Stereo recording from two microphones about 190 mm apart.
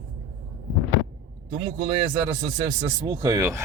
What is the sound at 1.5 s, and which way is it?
Speech, 25° right (ahead or behind).